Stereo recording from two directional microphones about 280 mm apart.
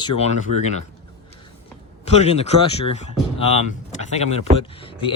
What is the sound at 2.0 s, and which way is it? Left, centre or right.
Speech, left.